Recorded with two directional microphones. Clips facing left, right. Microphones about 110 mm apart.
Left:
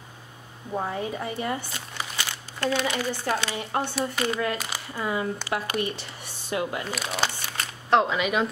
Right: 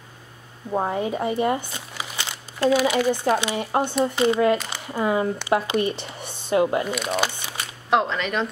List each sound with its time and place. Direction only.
0.7 s a woman's voice: 25° right (ahead or behind)
2.0 s crumpling: 15° right (ahead or behind)
3.1 s a woman's voice: 15° right (ahead or behind)
6.9 s speech: centre (ahead or behind)
7.5 s a sound: 5° right (ahead or behind)
8.1 s speech: 5° left (ahead or behind)